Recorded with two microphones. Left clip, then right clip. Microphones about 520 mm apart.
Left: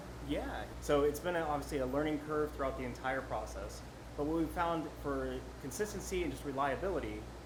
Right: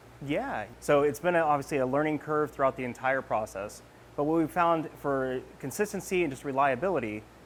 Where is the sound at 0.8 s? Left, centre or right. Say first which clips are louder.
Right 7 dB; right.